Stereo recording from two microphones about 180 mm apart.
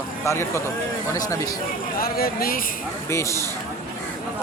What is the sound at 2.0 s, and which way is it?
Speech, 55° left (ahead or behind).